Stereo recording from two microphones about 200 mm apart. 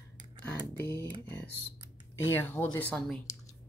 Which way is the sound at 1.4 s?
55° left (ahead or behind).